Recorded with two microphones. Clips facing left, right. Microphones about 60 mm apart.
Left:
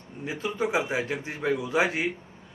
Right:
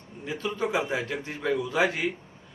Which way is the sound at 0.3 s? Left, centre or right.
Centre.